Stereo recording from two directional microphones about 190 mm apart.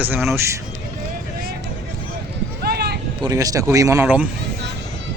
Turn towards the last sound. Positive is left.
turn(degrees=-5)  # may be behind; listen again after turning